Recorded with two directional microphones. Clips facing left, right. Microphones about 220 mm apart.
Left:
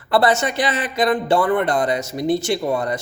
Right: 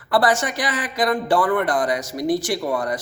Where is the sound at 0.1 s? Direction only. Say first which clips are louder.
Left 2 dB; 25° left (ahead or behind).